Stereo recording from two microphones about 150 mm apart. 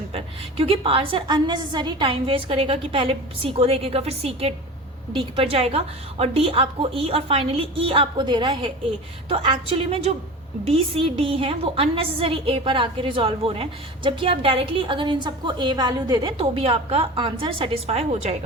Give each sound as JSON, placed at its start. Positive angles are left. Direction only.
{"t": 0.1, "sound": "a woman's voice", "side_deg": -40}